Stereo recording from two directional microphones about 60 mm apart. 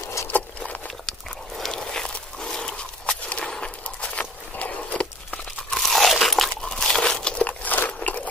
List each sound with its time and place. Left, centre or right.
1.6 s walk: centre
5.7 s crunch: centre; by 8.2 s left